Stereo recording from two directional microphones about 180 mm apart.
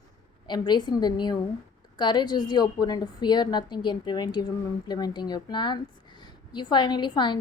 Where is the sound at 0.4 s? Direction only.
25° left (ahead or behind).